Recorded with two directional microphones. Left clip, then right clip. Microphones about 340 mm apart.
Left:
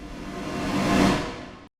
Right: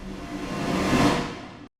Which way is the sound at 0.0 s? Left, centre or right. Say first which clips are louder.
Even; centre.